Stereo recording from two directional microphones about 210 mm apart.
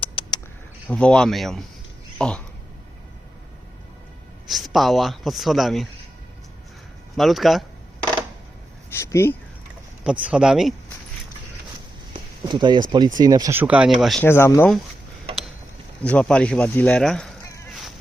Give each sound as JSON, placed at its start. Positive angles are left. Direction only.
{"t": 0.0, "sound": "a sound", "side_deg": 25}
{"t": 0.9, "sound": "speech", "side_deg": 5}
{"t": 4.4, "sound": "speech", "side_deg": 0}
{"t": 7.2, "sound": "speech", "side_deg": 0}
{"t": 8.9, "sound": "speech", "side_deg": 15}
{"t": 10.0, "sound": "speech", "side_deg": -5}
{"t": 12.5, "sound": "speech", "side_deg": -20}
{"t": 14.3, "sound": "speech", "side_deg": 10}
{"t": 16.0, "sound": "speech", "side_deg": 5}